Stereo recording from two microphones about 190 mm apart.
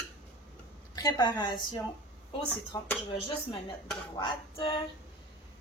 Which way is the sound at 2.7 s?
25° left (ahead or behind).